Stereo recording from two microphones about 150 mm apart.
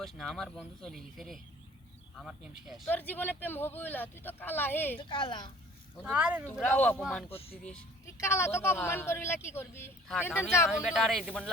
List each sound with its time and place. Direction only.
0.0 s speech: centre (ahead or behind)
2.8 s speech: 10° left (ahead or behind)
4.9 s speech: 35° left (ahead or behind)
6.0 s speech: 10° right (ahead or behind)
6.5 s speech: 10° left (ahead or behind)
7.3 s speech: 40° left (ahead or behind)
8.0 s speech: 15° left (ahead or behind)
10.7 s speech: 5° right (ahead or behind)